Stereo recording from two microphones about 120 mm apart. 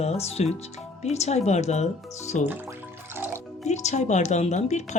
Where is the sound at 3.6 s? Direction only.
70° left (ahead or behind).